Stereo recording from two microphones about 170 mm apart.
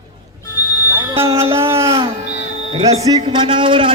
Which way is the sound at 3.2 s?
30° right (ahead or behind).